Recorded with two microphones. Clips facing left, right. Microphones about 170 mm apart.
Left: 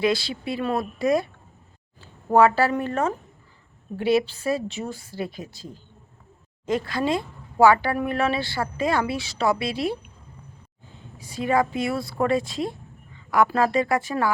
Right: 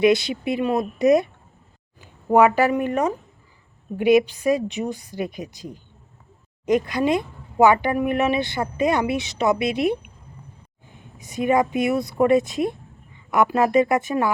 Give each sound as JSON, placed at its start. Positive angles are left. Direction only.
{"t": 0.0, "sound": "a woman's voice", "side_deg": -20}